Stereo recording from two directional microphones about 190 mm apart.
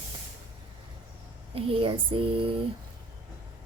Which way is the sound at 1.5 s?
25° right (ahead or behind).